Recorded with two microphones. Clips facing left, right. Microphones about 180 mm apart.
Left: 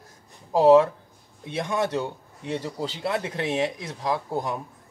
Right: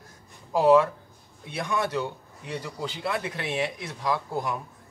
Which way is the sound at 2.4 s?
35° left (ahead or behind).